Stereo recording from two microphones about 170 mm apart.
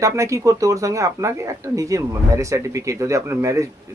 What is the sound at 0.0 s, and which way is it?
A man's voice, 20° right (ahead or behind).